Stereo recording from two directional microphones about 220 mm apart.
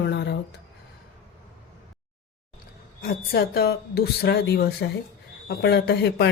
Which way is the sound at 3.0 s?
45° left (ahead or behind).